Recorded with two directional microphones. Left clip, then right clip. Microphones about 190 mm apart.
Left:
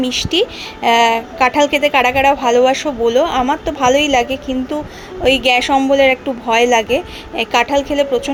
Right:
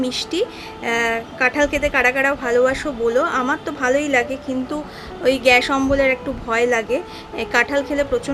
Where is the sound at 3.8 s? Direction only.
15° right (ahead or behind).